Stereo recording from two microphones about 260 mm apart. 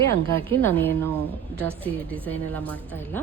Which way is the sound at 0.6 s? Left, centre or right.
Centre.